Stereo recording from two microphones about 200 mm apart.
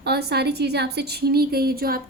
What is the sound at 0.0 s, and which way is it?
A woman's voice, 55° right (ahead or behind).